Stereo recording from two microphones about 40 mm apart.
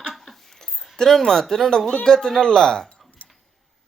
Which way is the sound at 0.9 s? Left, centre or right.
Centre.